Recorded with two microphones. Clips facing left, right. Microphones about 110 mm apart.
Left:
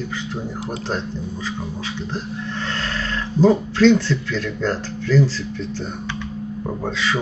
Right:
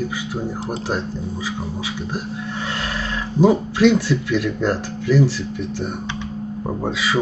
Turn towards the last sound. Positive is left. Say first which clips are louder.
# right 2 dB
turn(degrees=-10)  # may be behind; listen again after turning